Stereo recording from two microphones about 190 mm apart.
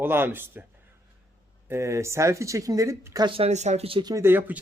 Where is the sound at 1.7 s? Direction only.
15° right (ahead or behind).